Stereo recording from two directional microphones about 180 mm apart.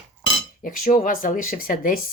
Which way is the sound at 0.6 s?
50° left (ahead or behind).